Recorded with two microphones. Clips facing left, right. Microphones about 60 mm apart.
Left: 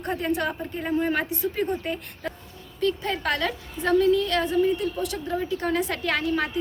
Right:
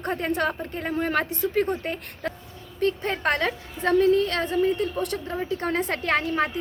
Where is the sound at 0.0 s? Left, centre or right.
Right.